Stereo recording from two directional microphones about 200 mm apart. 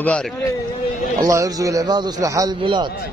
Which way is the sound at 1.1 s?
15° right (ahead or behind).